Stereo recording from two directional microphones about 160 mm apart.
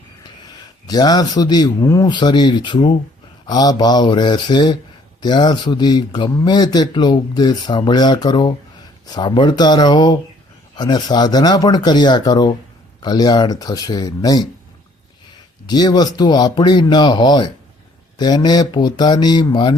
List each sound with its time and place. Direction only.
0.9 s speech: 25° left (ahead or behind)
15.6 s speech: 25° left (ahead or behind)